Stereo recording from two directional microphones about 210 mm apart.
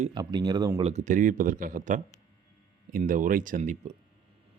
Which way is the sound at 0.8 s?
35° right (ahead or behind).